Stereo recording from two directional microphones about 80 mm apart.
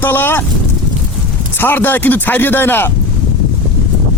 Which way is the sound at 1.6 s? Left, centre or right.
Left.